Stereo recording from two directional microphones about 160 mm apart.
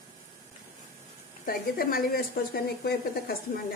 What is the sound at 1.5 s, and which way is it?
Speech, 65° left (ahead or behind).